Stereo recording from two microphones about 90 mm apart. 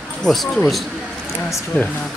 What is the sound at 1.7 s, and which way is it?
Speech, 20° left (ahead or behind).